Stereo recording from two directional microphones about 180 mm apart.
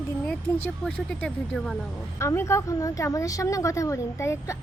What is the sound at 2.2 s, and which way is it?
Speech, 15° left (ahead or behind).